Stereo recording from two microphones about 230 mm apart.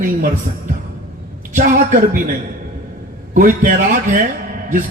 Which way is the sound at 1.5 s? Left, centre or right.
Right.